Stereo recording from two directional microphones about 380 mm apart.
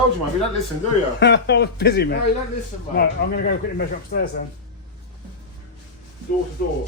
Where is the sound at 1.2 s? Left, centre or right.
Left.